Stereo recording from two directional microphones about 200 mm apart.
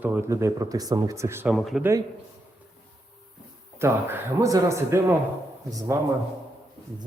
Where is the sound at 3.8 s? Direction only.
10° right (ahead or behind).